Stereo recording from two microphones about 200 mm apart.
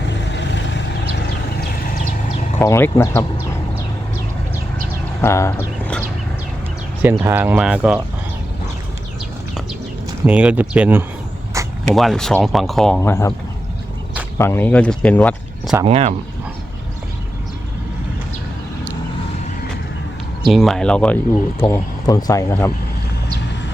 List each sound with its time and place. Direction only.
0.1 s vehicle: 60° left (ahead or behind)
2.6 s speech: 10° left (ahead or behind)
5.2 s a sound: 15° left (ahead or behind)
7.0 s speech: 10° right (ahead or behind)
10.2 s speech: 5° right (ahead or behind)
11.6 s a sound: 15° right (ahead or behind)
11.9 s speech: centre (ahead or behind)
13.0 s speech: 15° left (ahead or behind)
14.3 s speech: 10° left (ahead or behind)
15.8 s speech: 30° right (ahead or behind)
20.5 s speech: centre (ahead or behind)
21.7 s speech: 15° left (ahead or behind)